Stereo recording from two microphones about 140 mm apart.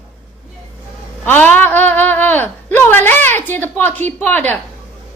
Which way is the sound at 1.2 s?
10° left (ahead or behind).